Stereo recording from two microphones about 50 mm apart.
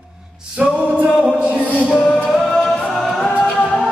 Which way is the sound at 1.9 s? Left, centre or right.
Centre.